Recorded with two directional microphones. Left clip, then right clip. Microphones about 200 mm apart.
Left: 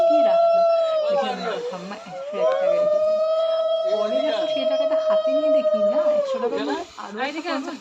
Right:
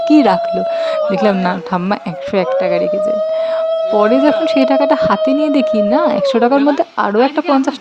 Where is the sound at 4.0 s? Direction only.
45° right (ahead or behind).